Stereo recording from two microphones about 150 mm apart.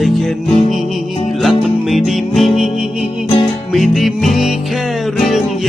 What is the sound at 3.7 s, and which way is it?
Music, centre (ahead or behind).